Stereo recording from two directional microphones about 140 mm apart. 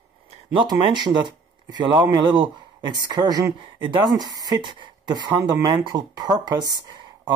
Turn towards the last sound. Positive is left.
turn(degrees=-30)  # may be behind; listen again after turning